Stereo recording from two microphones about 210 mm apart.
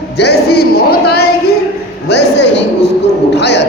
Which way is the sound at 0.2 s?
50° left (ahead or behind).